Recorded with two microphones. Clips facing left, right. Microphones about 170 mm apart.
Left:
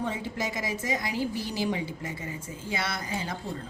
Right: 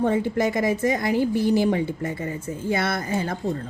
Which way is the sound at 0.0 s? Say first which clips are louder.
Right 10 dB; 55° right (ahead or behind).